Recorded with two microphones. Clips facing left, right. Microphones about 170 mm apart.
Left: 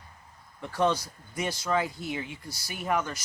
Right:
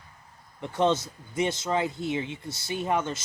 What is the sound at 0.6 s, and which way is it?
Speech, 20° right (ahead or behind).